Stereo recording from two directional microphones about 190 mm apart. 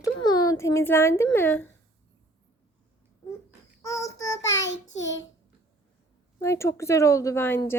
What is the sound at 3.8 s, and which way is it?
Child singing, 15° left (ahead or behind).